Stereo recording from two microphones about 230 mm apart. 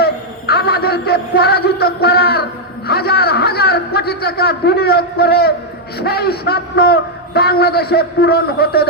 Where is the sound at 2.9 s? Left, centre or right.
Left.